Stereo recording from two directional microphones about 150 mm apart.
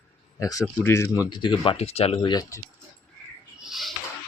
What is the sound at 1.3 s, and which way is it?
Speech, 30° left (ahead or behind).